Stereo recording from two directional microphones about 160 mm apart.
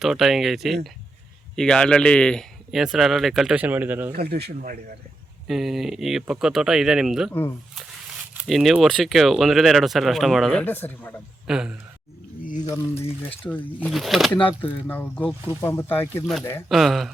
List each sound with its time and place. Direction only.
0.0 s speech: centre (ahead or behind)
4.1 s speech: 80° right
5.5 s speech: centre (ahead or behind)
8.4 s speech: centre (ahead or behind)
11.4 s speech: 5° right (ahead or behind)
13.1 s speech: 10° left (ahead or behind)
16.6 s speech: centre (ahead or behind)